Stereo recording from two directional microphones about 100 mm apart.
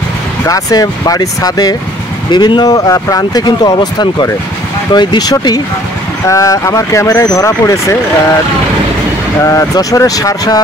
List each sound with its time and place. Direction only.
0.5 s speech: 35° left (ahead or behind)
9.4 s speech: 35° left (ahead or behind)